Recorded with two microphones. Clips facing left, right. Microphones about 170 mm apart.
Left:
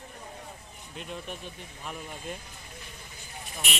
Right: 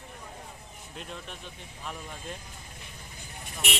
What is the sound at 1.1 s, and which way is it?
Speech, 10° left (ahead or behind).